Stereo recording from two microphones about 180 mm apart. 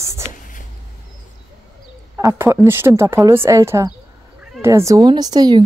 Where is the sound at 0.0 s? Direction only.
15° right (ahead or behind).